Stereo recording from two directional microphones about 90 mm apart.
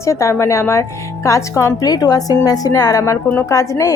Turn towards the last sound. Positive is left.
turn(degrees=35)  # may be behind; listen again after turning